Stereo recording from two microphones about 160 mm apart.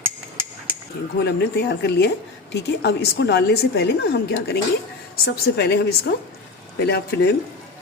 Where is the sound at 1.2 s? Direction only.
90° left.